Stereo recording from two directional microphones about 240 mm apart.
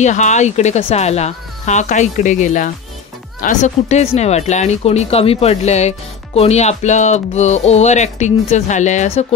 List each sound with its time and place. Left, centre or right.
0.0 s speech: left